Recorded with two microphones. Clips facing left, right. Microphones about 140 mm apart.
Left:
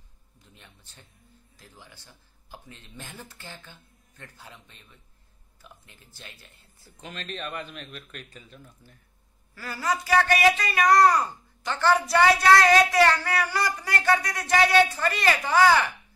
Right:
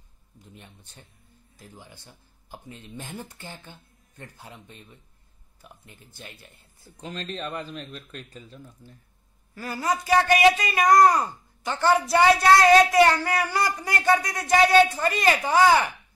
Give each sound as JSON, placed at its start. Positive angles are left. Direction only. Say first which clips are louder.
{"t": 1.6, "sound": "speech", "louder": "right 4 dB", "side_deg": -15}
{"t": 7.0, "sound": "speech", "louder": "right 3 dB", "side_deg": -35}
{"t": 9.6, "sound": "speech", "louder": "right 2 dB", "side_deg": -20}